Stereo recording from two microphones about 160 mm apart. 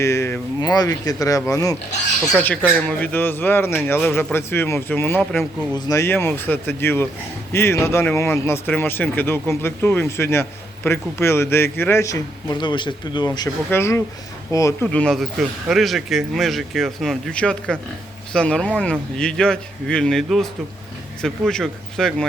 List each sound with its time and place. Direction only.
0.0 s a man's voice: 15° left (ahead or behind)
2.3 s a man's voice: 10° left (ahead or behind)
14.8 s speech: 5° left (ahead or behind)